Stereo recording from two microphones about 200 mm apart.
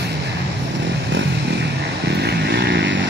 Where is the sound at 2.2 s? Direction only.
55° right (ahead or behind).